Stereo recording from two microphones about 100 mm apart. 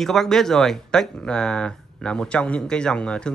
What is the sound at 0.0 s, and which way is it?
Speech, 5° left (ahead or behind).